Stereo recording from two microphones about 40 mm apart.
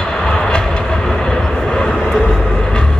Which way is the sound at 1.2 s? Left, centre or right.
Centre.